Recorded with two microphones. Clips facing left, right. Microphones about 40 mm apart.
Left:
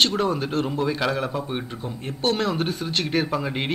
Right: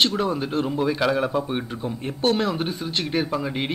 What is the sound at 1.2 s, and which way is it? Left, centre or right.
Speech, centre.